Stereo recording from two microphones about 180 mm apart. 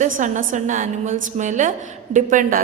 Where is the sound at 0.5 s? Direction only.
45° right (ahead or behind).